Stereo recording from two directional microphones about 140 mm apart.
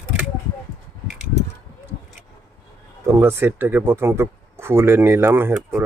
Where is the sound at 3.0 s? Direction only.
20° right (ahead or behind).